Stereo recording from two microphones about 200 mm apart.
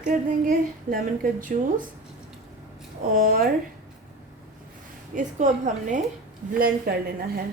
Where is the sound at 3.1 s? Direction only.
45° right (ahead or behind).